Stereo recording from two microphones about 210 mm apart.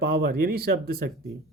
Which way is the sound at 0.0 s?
45° right (ahead or behind).